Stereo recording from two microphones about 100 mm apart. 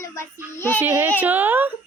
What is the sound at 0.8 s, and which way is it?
Speech, 20° right (ahead or behind).